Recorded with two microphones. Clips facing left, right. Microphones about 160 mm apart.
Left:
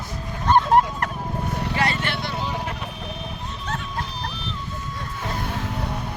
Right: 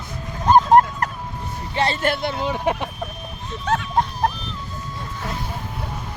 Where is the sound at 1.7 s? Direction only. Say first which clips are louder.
Right 3 dB; 25° right (ahead or behind).